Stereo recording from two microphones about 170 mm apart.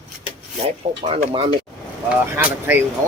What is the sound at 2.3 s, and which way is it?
Speech, 10° right (ahead or behind).